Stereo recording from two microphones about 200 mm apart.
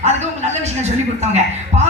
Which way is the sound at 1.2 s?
35° right (ahead or behind).